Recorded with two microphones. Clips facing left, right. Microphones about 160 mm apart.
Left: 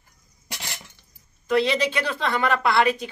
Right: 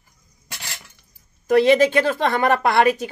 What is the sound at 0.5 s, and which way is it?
Cutlery, 15° left (ahead or behind).